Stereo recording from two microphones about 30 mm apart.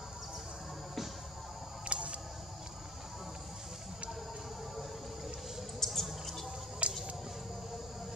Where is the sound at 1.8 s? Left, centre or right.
Right.